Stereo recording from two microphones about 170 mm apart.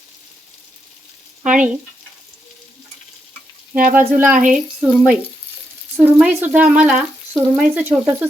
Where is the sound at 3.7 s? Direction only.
55° right (ahead or behind).